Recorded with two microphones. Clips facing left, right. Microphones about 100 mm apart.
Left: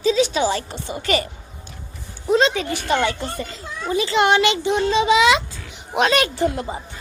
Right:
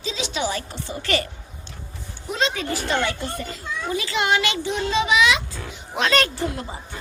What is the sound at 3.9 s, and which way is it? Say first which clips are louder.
A child's voice: left 6 dB; 35° left (ahead or behind).